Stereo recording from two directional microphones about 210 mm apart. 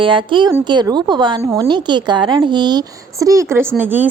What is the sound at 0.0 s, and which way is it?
A woman's voice, 25° right (ahead or behind).